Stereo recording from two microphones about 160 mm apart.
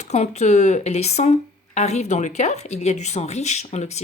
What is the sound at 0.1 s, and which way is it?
Speech, 45° left (ahead or behind).